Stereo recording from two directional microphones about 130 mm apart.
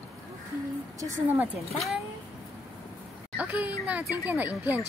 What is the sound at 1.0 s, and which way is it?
Speech, 20° right (ahead or behind).